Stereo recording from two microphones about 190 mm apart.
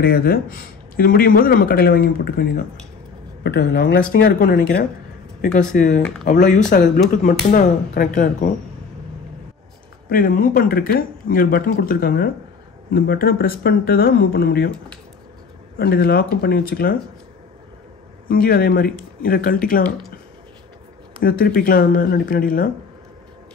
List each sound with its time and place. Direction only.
0.0 s speech: 50° left (ahead or behind)
10.0 s speech: 45° left (ahead or behind)
15.8 s speech: 55° left (ahead or behind)
18.3 s speech: 50° left (ahead or behind)
21.2 s speech: 50° left (ahead or behind)